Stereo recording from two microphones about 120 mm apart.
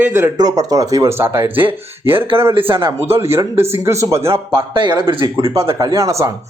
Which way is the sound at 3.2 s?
20° right (ahead or behind).